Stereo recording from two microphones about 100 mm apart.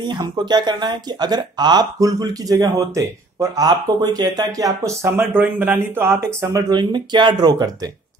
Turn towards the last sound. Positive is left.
turn(degrees=-40)  # may be behind; listen again after turning